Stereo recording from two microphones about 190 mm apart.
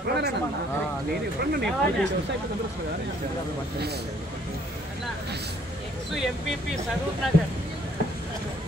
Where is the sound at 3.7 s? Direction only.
60° right (ahead or behind).